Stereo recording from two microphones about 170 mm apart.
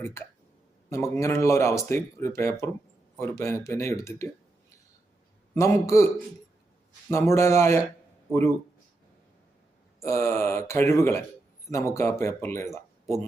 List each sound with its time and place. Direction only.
0.0 s speech: 15° left (ahead or behind)
5.5 s speech: 15° left (ahead or behind)
7.1 s speech: 15° left (ahead or behind)
10.0 s speech: 15° left (ahead or behind)